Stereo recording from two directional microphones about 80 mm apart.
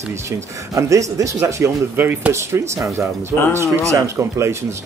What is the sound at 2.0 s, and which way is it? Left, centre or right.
Speech, right.